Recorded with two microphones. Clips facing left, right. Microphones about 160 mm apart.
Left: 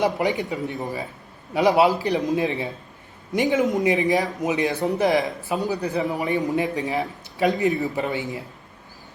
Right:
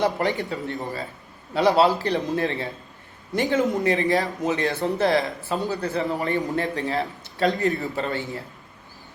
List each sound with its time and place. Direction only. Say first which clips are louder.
0.0 s a man's voice: left 1 dB; 15° left (ahead or behind)